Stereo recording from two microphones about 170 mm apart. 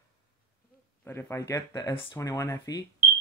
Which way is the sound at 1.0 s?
15° left (ahead or behind).